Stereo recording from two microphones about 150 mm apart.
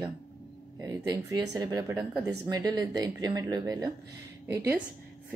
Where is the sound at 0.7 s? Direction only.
20° right (ahead or behind).